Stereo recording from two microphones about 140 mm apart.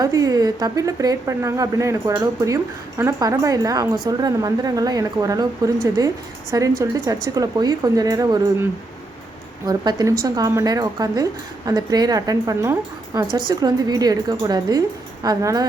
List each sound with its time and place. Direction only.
0.0 s a woman's voice: 25° right (ahead or behind)
9.6 s a woman's voice: 25° right (ahead or behind)